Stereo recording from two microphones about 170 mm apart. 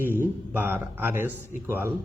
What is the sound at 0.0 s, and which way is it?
A man's voice, 10° right (ahead or behind).